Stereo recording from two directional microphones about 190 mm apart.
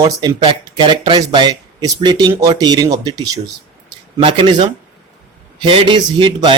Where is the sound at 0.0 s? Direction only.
20° right (ahead or behind).